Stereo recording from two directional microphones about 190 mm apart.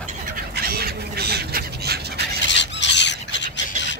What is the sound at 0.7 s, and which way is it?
Fowl, 55° right (ahead or behind).